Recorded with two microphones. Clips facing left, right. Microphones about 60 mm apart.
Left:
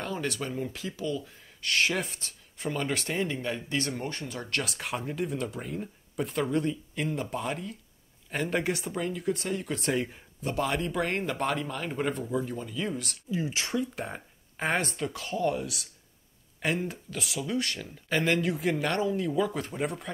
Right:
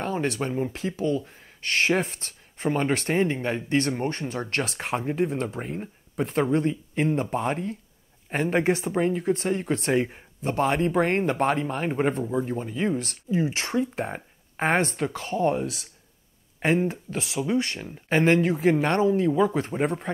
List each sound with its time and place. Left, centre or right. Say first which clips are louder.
0.0 s speech: right 6 dB; right